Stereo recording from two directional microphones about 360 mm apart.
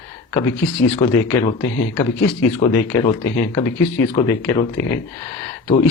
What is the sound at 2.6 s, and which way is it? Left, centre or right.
Speech, centre.